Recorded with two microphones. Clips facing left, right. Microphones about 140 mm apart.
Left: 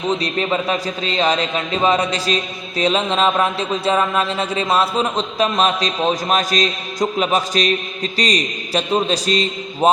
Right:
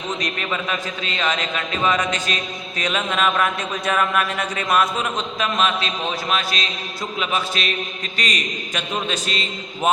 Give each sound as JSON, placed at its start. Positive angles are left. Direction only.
{"t": 0.1, "sound": "a man's voice", "side_deg": 30}